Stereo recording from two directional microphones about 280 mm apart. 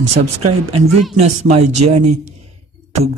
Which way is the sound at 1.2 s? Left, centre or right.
Right.